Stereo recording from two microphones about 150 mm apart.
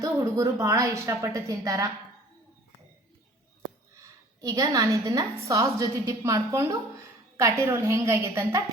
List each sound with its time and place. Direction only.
0.0 s a woman's voice: 20° right (ahead or behind)
3.9 s a woman's voice: 25° right (ahead or behind)